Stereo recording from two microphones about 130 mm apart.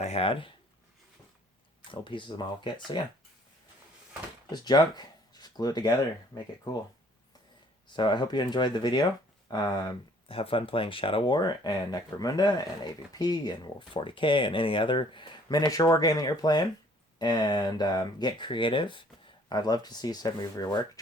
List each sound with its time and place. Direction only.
0.0 s speech: 50° left (ahead or behind)
1.9 s speech: 40° left (ahead or behind)
4.5 s speech: 35° left (ahead or behind)
7.9 s speech: 35° left (ahead or behind)
10.2 s speech: 45° left (ahead or behind)